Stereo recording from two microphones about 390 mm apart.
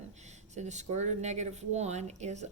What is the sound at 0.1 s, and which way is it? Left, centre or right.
Speech, centre.